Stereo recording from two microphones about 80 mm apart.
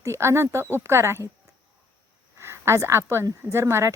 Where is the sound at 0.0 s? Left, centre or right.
Right.